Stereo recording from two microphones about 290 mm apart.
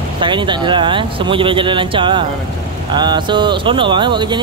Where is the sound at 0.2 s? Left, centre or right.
Centre.